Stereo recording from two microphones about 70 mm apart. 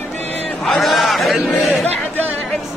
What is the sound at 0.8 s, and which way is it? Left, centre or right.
Chant, centre.